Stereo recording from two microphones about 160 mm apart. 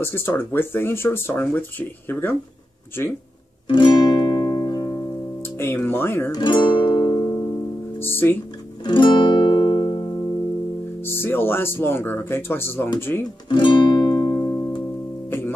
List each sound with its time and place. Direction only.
0.0 s speech: 15° left (ahead or behind)
3.6 s music: 30° left (ahead or behind)
5.6 s speech: 15° left (ahead or behind)
6.3 s music: 30° left (ahead or behind)
8.0 s speech: 15° left (ahead or behind)
8.8 s music: 30° left (ahead or behind)
11.1 s speech: 15° left (ahead or behind)
13.5 s music: 30° left (ahead or behind); by 15.5 s 15° left (ahead or behind)